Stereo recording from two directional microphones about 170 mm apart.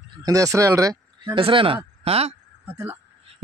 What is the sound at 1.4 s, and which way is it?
Speech, 30° right (ahead or behind).